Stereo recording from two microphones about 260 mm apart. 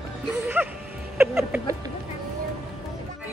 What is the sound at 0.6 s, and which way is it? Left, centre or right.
Music, centre.